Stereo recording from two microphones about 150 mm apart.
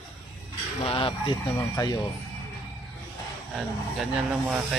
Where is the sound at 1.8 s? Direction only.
25° left (ahead or behind).